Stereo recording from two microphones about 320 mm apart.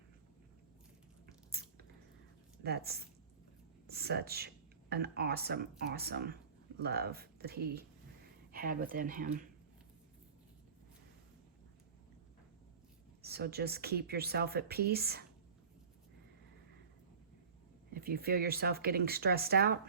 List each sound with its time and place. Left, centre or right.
1.6 s squish: right
2.6 s speech: right
13.2 s speech: right
17.9 s speech: right